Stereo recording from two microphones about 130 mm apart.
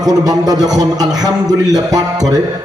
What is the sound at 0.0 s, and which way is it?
A man's voice, 30° right (ahead or behind).